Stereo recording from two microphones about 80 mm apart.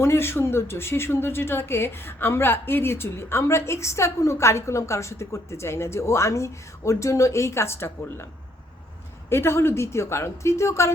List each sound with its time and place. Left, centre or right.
0.0 s a woman's voice: left
9.3 s a woman's voice: left